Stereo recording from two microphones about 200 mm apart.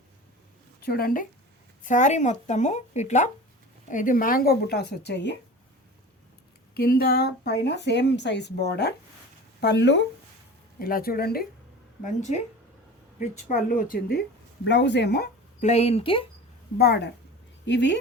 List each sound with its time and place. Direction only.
0.8 s speech: 50° left (ahead or behind)
6.7 s speech: 50° left (ahead or behind)
10.8 s speech: 45° left (ahead or behind)
12.0 s speech: 35° left (ahead or behind)
14.6 s speech: 60° left (ahead or behind)
15.6 s speech: 30° left (ahead or behind)
16.7 s speech: 55° left (ahead or behind)